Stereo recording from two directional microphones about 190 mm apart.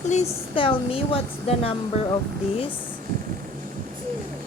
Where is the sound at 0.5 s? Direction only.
25° left (ahead or behind).